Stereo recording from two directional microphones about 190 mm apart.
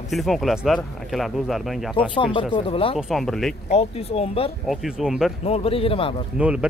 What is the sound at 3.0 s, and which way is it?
Speech, centre (ahead or behind).